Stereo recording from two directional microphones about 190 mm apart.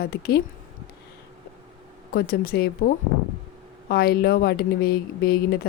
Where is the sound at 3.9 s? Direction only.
55° left (ahead or behind).